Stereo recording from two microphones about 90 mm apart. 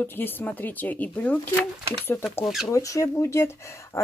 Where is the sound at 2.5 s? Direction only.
5° right (ahead or behind).